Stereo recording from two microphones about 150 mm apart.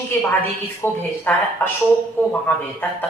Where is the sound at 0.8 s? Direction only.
15° left (ahead or behind).